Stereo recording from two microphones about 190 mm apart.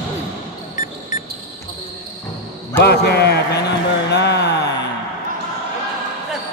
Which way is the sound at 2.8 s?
60° left (ahead or behind).